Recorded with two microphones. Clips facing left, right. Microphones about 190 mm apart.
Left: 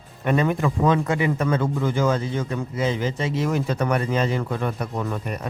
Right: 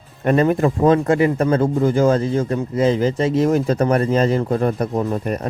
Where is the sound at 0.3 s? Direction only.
40° right (ahead or behind).